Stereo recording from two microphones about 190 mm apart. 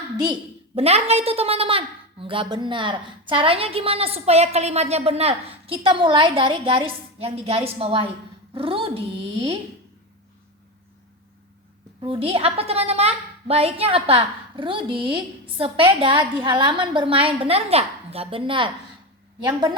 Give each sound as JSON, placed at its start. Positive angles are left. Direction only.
{"t": 0.8, "sound": "a woman's voice", "side_deg": -35}
{"t": 11.9, "sound": "a woman's voice", "side_deg": -25}